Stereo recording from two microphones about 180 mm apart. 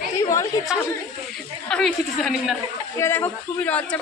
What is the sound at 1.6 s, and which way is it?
Speech, 5° left (ahead or behind).